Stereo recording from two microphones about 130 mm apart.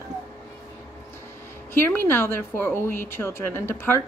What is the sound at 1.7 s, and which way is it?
A woman's voice, 15° left (ahead or behind).